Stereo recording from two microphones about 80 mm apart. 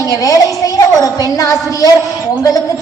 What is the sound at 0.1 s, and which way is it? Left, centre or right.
A woman's voice, left.